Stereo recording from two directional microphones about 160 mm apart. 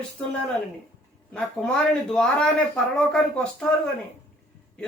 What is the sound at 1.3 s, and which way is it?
Speech, 5° left (ahead or behind).